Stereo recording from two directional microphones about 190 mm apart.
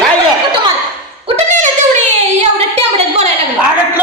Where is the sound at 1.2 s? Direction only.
35° right (ahead or behind).